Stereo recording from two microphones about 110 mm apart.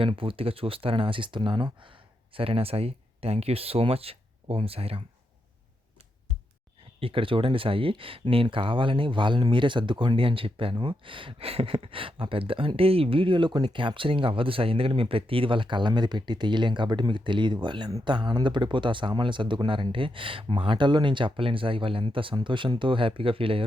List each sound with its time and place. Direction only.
0.0 s speech: 55° right (ahead or behind)
2.3 s speech: 55° right (ahead or behind)
7.0 s speech: 50° right (ahead or behind)